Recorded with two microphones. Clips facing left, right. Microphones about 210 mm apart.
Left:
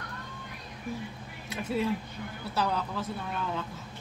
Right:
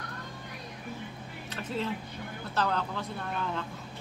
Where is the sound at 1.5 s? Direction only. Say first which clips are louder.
Left 4 dB; 10° left (ahead or behind).